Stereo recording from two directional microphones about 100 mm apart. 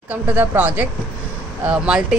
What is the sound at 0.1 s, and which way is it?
Speech, 15° right (ahead or behind).